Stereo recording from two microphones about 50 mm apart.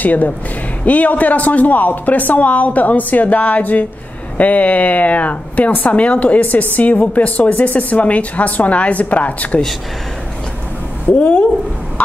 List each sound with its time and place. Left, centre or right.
0.0 s a woman's voice: left
11.1 s speech: left